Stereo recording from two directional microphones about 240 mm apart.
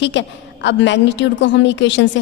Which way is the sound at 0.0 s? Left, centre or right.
Left.